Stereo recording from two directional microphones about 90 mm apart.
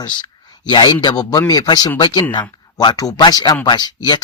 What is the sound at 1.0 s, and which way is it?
Speech, 45° left (ahead or behind).